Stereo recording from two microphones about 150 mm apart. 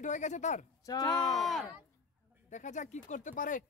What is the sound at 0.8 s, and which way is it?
Speech, 25° left (ahead or behind).